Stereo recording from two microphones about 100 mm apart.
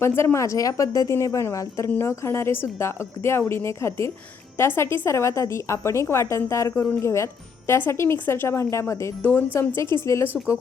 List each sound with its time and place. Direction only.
0.0 s speech: 25° left (ahead or behind)
10.2 s speech: 10° right (ahead or behind)